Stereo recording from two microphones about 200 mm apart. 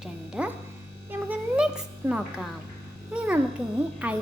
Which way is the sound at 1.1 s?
5° right (ahead or behind).